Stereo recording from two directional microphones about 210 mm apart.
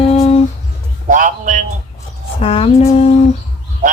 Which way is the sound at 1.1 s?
40° right (ahead or behind).